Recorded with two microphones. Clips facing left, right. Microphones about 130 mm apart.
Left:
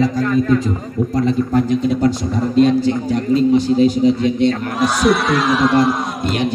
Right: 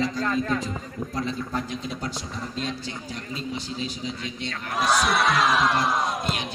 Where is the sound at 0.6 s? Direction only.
55° left (ahead or behind).